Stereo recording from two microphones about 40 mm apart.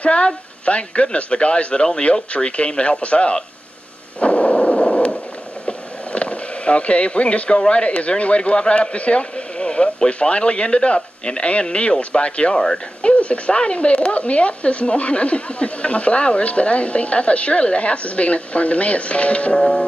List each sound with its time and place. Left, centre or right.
0.0 s a man's voice: left
4.2 s a sound: left
5.7 s speech: left
19.5 s music: centre